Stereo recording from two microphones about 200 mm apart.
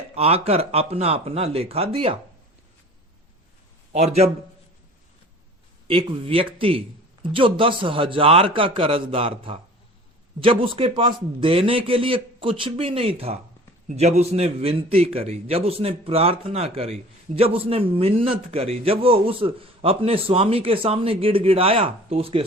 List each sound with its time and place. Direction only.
0.1 s a man's voice: 30° right (ahead or behind)
3.9 s a man's voice: 30° right (ahead or behind)
5.9 s a man's voice: 25° right (ahead or behind)